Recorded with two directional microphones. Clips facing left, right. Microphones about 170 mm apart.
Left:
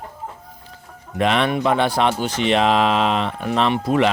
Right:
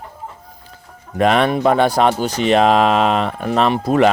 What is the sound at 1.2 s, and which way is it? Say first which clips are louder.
Speech: right 4 dB; 45° right (ahead or behind).